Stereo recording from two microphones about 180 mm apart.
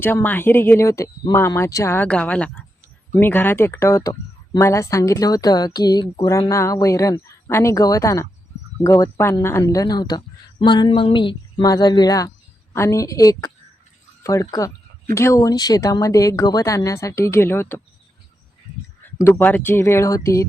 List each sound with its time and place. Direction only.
0.0 s speech: 10° left (ahead or behind)
19.0 s speech: 10° left (ahead or behind)